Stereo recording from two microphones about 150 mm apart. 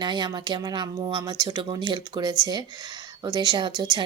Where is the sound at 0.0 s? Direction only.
30° right (ahead or behind).